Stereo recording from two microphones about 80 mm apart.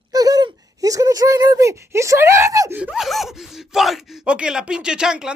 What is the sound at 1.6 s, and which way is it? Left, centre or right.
Speech, right.